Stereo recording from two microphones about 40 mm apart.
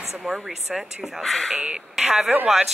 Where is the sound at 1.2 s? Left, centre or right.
Centre.